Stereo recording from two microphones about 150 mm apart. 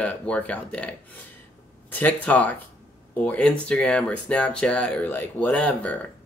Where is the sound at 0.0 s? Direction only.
10° left (ahead or behind).